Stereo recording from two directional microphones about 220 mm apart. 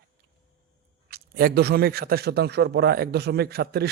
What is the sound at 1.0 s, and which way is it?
A man's voice, 45° right (ahead or behind).